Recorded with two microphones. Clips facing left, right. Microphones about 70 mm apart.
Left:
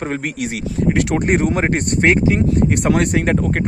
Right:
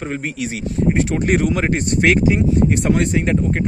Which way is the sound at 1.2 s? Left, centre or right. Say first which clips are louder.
Left 1 dB; left.